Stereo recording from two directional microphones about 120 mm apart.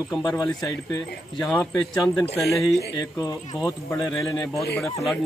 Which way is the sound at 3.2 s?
30° left (ahead or behind).